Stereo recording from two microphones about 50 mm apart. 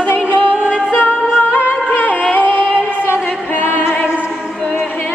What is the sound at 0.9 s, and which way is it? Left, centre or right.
Music, left.